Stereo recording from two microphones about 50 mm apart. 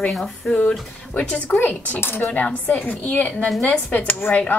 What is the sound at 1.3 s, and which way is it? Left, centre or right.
Speech, left.